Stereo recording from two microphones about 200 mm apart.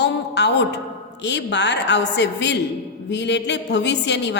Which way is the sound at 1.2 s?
60° left (ahead or behind).